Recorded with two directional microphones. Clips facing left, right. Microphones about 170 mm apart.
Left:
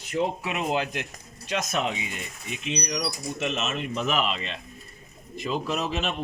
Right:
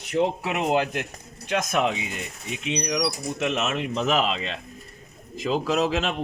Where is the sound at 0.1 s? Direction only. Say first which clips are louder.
Right 3 dB; 65° right (ahead or behind).